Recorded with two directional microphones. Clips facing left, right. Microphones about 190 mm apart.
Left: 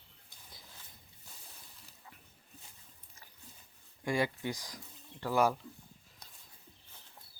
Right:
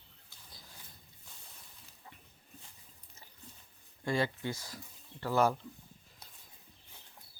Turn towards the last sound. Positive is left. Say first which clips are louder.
# even
turn(degrees=10)  # may be behind; listen again after turning